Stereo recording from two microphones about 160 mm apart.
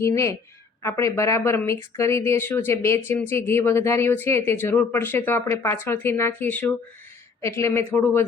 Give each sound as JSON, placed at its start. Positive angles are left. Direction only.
{"t": 0.0, "sound": "speech", "side_deg": 20}